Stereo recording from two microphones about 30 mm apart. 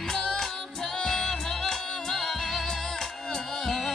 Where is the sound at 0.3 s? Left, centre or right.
Centre.